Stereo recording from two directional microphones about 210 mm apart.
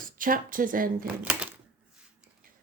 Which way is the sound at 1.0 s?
5° right (ahead or behind).